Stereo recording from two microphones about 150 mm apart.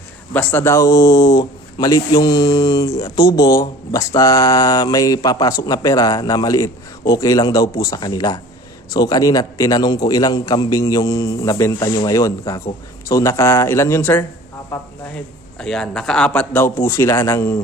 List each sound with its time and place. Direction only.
0.3 s speech: 15° left (ahead or behind)
15.1 s a man's voice: 5° left (ahead or behind)